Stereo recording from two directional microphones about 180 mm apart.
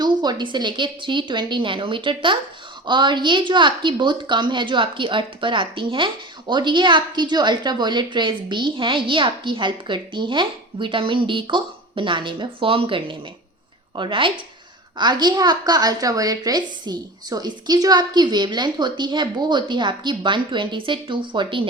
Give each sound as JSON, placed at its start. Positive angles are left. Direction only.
{"t": 0.0, "sound": "a woman's voice", "side_deg": -25}